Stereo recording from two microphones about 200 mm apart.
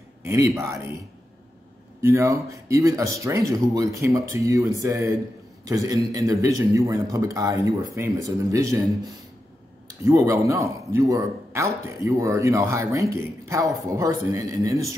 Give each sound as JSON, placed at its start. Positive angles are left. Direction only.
{"t": 0.2, "sound": "a man's voice", "side_deg": -15}
{"t": 2.0, "sound": "a man's voice", "side_deg": -15}